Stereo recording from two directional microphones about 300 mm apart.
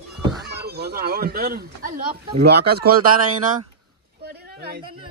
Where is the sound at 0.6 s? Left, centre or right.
Right.